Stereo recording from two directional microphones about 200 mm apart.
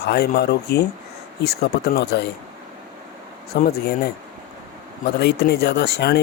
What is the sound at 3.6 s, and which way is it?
Speech, 50° left (ahead or behind).